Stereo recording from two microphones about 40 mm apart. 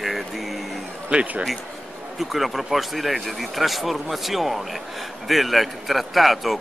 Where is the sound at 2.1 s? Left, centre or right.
Centre.